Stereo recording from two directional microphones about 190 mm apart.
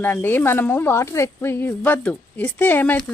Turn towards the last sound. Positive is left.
turn(degrees=10)  # may be behind; listen again after turning